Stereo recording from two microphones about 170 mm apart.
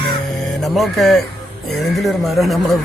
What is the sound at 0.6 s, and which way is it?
Speech, centre (ahead or behind).